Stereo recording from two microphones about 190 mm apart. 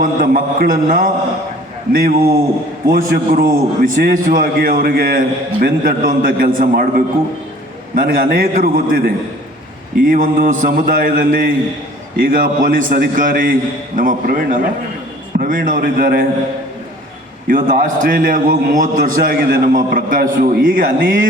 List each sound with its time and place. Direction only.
0.0 s a man's voice: 45° right (ahead or behind)
17.5 s a man's voice: 45° right (ahead or behind)